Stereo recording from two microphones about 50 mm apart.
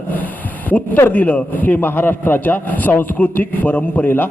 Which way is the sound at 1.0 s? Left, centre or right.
Left.